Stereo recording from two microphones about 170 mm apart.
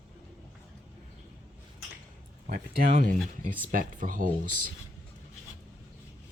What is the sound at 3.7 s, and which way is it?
Speech, 55° right (ahead or behind).